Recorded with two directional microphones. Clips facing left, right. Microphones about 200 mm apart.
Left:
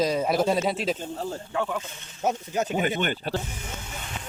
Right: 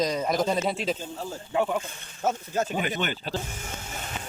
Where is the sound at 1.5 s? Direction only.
15° right (ahead or behind).